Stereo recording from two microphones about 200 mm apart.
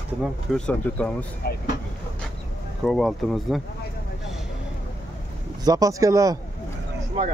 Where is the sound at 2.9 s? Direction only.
Centre (ahead or behind).